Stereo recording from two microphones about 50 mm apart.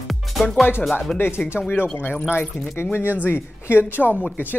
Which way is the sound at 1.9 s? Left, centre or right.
Left.